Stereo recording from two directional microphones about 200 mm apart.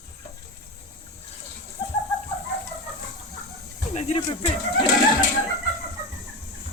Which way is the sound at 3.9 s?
30° left (ahead or behind).